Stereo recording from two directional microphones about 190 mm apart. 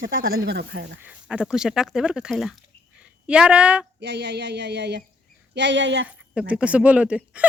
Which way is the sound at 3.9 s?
60° right (ahead or behind).